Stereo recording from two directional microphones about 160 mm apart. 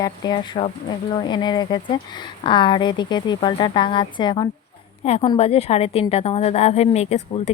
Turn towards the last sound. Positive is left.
turn(degrees=45)  # may be behind; listen again after turning